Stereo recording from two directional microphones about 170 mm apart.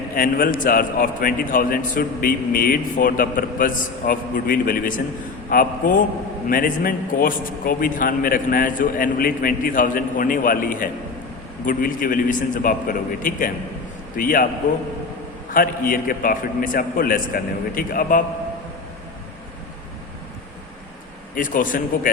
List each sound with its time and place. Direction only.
0.2 s a man's voice: 60° left (ahead or behind)
15.4 s a man's voice: 55° left (ahead or behind)
21.3 s a man's voice: 50° left (ahead or behind)